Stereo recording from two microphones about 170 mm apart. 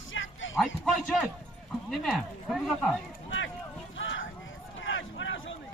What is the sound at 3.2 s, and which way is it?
Run, 90° left.